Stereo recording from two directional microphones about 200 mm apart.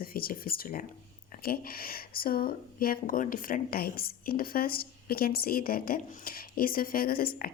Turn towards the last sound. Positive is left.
turn(degrees=45)  # may be behind; listen again after turning